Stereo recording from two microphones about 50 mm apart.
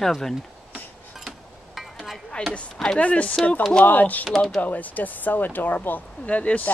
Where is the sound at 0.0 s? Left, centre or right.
Centre.